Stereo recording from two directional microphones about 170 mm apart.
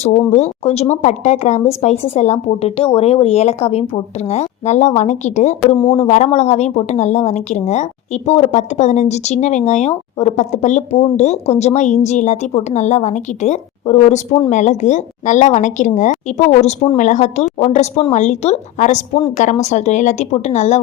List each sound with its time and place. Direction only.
0.0 s a woman's voice: 40° left (ahead or behind)